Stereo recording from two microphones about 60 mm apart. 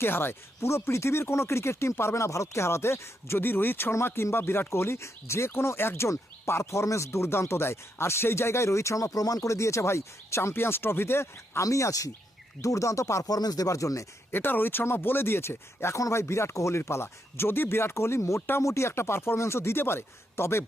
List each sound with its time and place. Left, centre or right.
0.0 s speech: left
6.1 s speech: left
11.6 s speech: left
14.3 s speech: left
16.0 s speech: left
16.2 s speech: left
18.3 s speech: left
18.6 s speech: left